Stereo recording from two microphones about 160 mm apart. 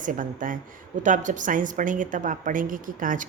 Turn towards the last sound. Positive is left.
turn(degrees=-55)  # may be behind; listen again after turning